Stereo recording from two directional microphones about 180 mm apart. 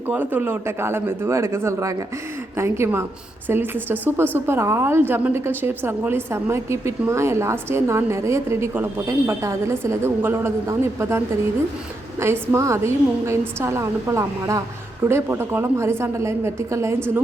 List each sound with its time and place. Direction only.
0.1 s a woman's voice: 10° right (ahead or behind)
12.2 s a woman's voice: 15° right (ahead or behind)